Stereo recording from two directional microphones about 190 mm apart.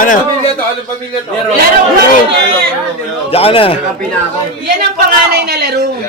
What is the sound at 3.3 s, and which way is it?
Speech, 30° left (ahead or behind).